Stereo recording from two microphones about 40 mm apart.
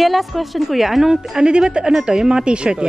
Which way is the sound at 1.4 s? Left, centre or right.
Right.